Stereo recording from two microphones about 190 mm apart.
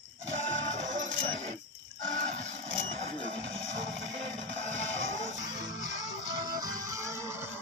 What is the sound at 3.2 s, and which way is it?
Music, 75° right (ahead or behind).